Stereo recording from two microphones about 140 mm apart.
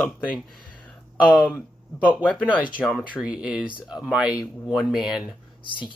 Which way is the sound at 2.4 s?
10° right (ahead or behind).